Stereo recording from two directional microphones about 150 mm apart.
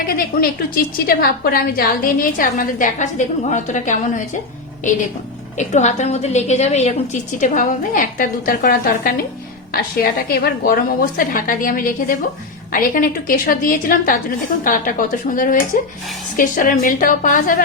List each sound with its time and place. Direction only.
0.0 s a woman's voice: 80° left; by 4.2 s 55° left (ahead or behind)
5.5 s a woman's voice: 55° left (ahead or behind); by 10.8 s 80° left
11.2 s a woman's voice: 65° left (ahead or behind)
15.7 s a woman's voice: 75° left (ahead or behind)
16.4 s a woman's voice: 65° left (ahead or behind)